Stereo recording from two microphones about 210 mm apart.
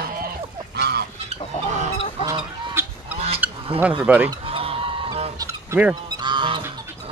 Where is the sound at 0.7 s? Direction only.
50° right (ahead or behind).